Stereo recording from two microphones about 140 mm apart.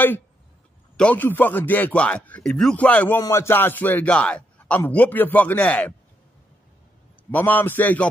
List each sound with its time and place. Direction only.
0.9 s a man's voice: 10° left (ahead or behind)
7.2 s a man's voice: 15° left (ahead or behind)